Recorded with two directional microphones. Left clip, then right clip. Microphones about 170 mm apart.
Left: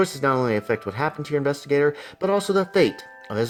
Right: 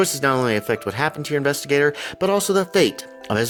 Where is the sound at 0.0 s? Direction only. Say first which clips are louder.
Right 2 dB; 55° right (ahead or behind).